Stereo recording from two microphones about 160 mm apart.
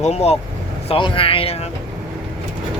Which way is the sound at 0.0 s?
40° left (ahead or behind).